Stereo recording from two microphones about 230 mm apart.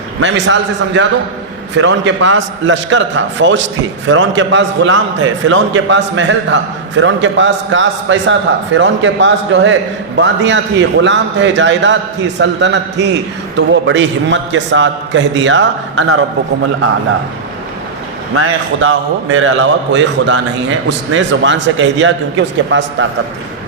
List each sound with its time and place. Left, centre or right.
0.2 s a man's voice: right
18.3 s a man's voice: right